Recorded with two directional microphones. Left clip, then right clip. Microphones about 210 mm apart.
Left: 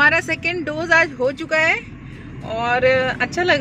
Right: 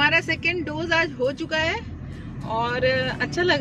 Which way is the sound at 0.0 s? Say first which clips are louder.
Left 4 dB; 5° left (ahead or behind).